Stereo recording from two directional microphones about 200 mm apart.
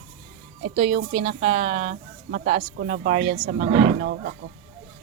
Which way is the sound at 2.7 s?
50° right (ahead or behind).